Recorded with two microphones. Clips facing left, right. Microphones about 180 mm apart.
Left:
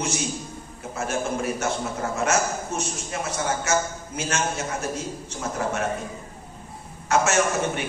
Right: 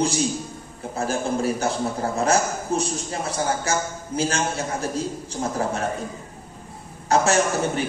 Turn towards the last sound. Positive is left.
turn(degrees=-35)  # may be behind; listen again after turning